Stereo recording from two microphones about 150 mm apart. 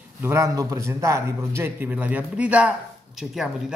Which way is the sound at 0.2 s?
20° right (ahead or behind).